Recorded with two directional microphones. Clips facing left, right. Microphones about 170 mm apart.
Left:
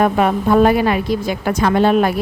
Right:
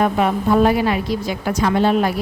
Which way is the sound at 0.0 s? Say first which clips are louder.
Left 2 dB; 55° left (ahead or behind).